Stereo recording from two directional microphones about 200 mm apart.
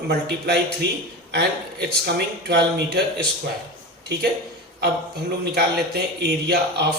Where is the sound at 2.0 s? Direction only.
55° right (ahead or behind).